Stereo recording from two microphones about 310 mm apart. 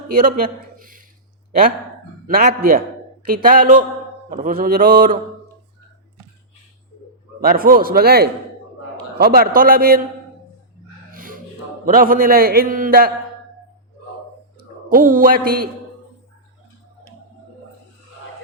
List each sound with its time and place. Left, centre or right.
0.1 s a man's voice: right
2.2 s a man's voice: right
7.4 s a man's voice: right
11.1 s music: right
11.9 s a man's voice: right
14.8 s a man's voice: right